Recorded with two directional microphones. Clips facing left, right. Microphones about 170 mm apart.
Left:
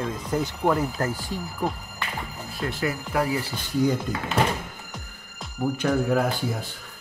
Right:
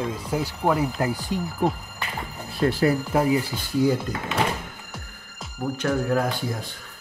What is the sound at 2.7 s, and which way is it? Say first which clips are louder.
Speech: right 6 dB; 35° right (ahead or behind).